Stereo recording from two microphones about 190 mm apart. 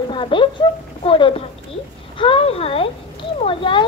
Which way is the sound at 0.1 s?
25° left (ahead or behind).